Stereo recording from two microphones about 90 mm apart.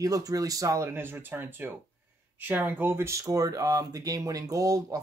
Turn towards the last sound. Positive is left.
turn(degrees=-40)  # may be behind; listen again after turning